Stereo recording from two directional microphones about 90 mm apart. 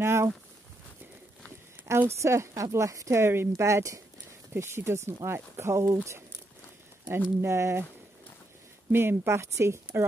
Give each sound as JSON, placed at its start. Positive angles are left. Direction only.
{"t": 0.0, "sound": "a sound", "side_deg": -30}
{"t": 1.9, "sound": "speech", "side_deg": -30}
{"t": 7.1, "sound": "speech", "side_deg": -30}
{"t": 8.9, "sound": "speech", "side_deg": -25}